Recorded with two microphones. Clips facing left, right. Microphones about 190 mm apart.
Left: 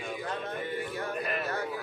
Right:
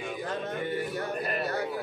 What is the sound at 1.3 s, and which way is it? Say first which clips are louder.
Speech: right 2 dB; 35° right (ahead or behind).